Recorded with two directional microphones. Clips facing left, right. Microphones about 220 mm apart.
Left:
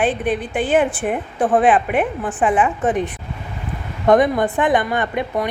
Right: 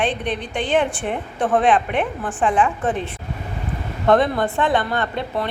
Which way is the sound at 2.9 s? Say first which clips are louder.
Left 4 dB; 15° left (ahead or behind).